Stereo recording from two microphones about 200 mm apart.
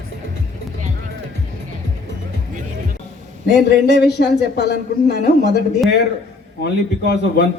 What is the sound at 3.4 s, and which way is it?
Speech, 55° left (ahead or behind).